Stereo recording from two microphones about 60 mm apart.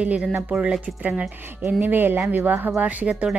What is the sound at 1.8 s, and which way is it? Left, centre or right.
Speech, right.